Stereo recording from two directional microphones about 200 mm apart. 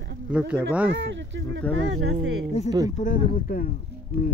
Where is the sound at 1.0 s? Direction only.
65° right (ahead or behind).